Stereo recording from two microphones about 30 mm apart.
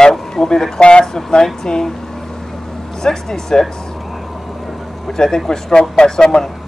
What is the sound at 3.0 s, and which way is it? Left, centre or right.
Speech, centre.